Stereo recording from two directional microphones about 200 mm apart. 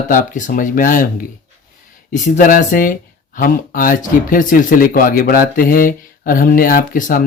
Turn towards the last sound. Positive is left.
turn(degrees=40)  # may be behind; listen again after turning